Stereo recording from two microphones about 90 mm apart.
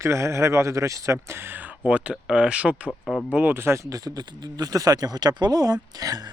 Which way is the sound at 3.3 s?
25° right (ahead or behind).